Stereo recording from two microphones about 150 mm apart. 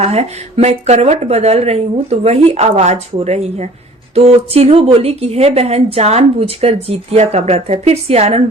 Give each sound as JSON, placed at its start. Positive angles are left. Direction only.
{"t": 0.0, "sound": "speech", "side_deg": -45}